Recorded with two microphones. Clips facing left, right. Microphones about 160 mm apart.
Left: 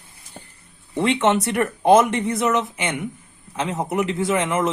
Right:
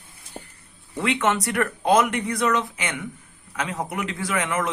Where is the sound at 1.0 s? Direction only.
25° left (ahead or behind).